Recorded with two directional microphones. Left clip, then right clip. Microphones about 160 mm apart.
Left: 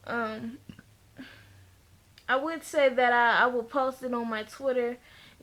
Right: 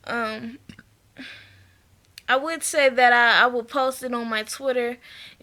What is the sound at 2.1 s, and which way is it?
Speech, 15° right (ahead or behind).